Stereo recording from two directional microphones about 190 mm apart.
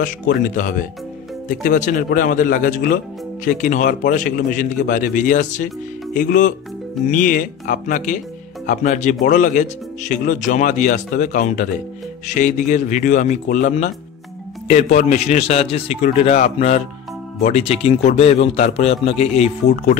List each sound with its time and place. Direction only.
0.0 s a man's voice: 45° left (ahead or behind)